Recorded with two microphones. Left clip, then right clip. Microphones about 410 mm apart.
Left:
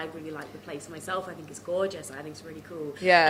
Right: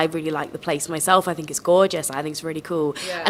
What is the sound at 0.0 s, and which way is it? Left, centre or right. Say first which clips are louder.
Speech: right 14 dB; right.